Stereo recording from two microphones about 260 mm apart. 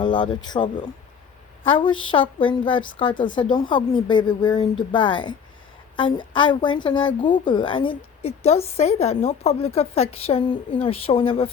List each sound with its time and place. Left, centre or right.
0.0 s a woman's voice: centre